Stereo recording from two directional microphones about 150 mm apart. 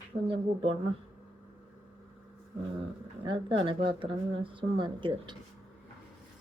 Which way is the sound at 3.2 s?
35° right (ahead or behind).